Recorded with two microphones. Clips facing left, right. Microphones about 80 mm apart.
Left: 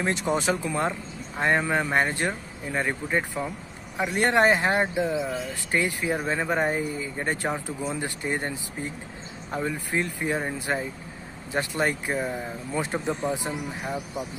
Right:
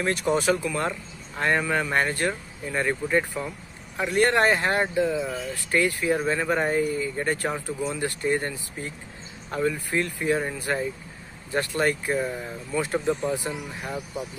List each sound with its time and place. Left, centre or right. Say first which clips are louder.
0.0 s speech: right 2 dB; left